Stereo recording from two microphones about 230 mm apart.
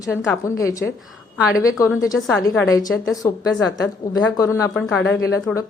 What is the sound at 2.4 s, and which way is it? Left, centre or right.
Speech, centre.